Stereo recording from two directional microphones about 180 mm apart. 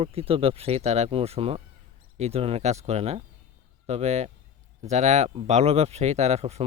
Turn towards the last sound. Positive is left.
turn(degrees=-35)  # may be behind; listen again after turning